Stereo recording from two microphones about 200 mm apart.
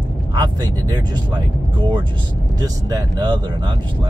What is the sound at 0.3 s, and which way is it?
Speech, 20° right (ahead or behind).